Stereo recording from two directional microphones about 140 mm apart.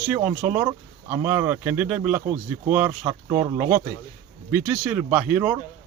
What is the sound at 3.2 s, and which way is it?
Speech, 25° right (ahead or behind).